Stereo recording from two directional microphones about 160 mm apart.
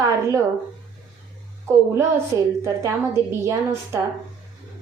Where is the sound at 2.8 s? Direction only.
15° right (ahead or behind).